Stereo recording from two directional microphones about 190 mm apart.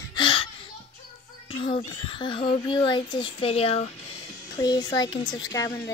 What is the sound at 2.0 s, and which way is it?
Speech, 25° left (ahead or behind).